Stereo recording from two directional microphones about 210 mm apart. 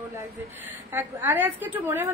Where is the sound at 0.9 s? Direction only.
10° right (ahead or behind).